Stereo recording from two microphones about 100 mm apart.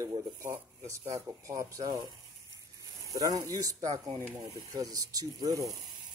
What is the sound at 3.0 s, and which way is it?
Speech, 35° right (ahead or behind).